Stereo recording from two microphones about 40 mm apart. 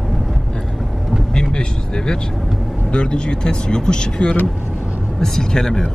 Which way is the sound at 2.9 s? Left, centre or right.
Left.